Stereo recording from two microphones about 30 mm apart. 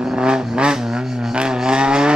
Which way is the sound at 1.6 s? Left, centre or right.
Right.